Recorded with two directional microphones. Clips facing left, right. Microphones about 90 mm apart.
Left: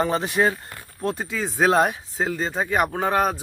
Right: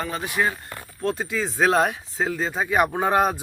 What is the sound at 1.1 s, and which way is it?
Speech, centre (ahead or behind).